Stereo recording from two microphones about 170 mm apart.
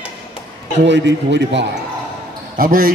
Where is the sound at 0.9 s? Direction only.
90° right.